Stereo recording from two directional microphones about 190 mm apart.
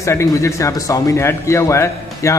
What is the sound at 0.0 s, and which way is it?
A man's voice, 15° left (ahead or behind).